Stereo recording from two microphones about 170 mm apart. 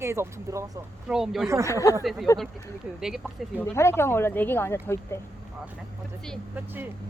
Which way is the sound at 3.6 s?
15° left (ahead or behind).